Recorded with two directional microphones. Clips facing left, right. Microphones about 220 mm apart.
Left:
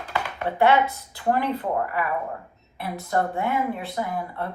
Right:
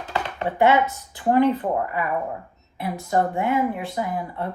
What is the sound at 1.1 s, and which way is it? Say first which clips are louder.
A woman's voice: right 6 dB; 20° right (ahead or behind).